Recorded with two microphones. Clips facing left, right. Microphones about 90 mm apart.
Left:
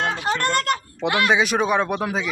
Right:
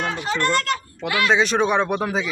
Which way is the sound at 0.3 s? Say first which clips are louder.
Right 1 dB; 50° left (ahead or behind).